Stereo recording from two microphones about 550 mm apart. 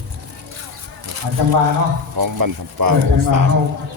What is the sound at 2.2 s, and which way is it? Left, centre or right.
Speech, right.